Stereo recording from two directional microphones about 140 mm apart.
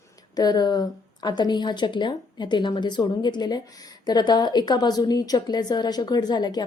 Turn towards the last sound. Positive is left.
turn(degrees=30)  # may be behind; listen again after turning